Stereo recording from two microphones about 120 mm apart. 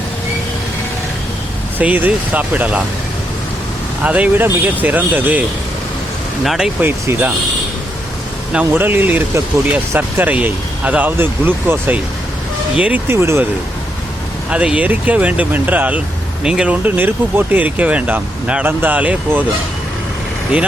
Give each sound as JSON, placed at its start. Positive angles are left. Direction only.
{"t": 1.8, "sound": "speech", "side_deg": -10}
{"t": 4.0, "sound": "speech", "side_deg": -10}
{"t": 6.4, "sound": "speech", "side_deg": 0}
{"t": 6.8, "sound": "speech", "side_deg": -15}
{"t": 8.5, "sound": "speech", "side_deg": -15}
{"t": 14.5, "sound": "speech", "side_deg": -10}